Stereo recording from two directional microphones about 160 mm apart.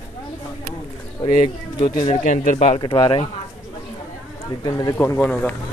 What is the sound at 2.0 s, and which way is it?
Speech, 45° left (ahead or behind).